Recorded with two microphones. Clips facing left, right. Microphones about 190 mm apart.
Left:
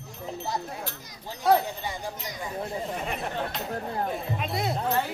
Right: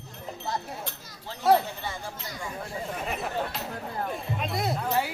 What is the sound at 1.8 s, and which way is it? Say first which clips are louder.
Speech: left 2 dB; 15° left (ahead or behind).